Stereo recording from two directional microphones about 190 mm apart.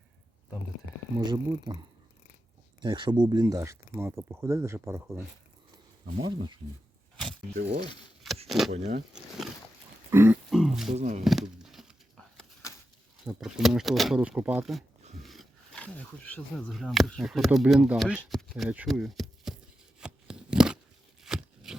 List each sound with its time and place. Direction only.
1.2 s speech: 25° right (ahead or behind)
2.8 s speech: 25° right (ahead or behind)
7.5 s speech: 35° right (ahead or behind)
8.4 s speech: centre (ahead or behind)
8.7 s speech: 35° right (ahead or behind)
10.1 s grunt: 15° right (ahead or behind)
10.5 s a sound: centre (ahead or behind)
10.9 s speech: 35° right (ahead or behind)
11.2 s a sound: centre (ahead or behind)
13.2 s speech: centre (ahead or behind)
20.0 s a sound: 5° right (ahead or behind)